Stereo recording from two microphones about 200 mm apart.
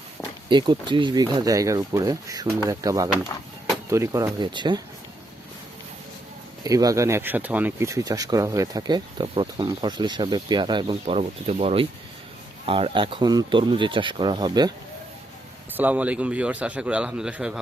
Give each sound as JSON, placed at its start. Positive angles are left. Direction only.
{"t": 0.5, "sound": "a man's voice", "side_deg": -20}
{"t": 6.7, "sound": "speech", "side_deg": -15}
{"t": 15.7, "sound": "a man's voice", "side_deg": -10}